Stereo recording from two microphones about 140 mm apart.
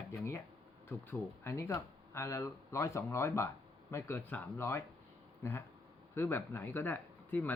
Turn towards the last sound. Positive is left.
turn(degrees=15)  # may be behind; listen again after turning